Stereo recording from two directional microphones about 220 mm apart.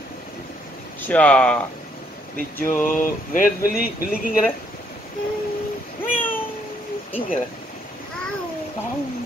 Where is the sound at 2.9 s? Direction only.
40° left (ahead or behind).